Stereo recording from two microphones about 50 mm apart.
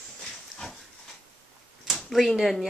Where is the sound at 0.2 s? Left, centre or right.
Centre.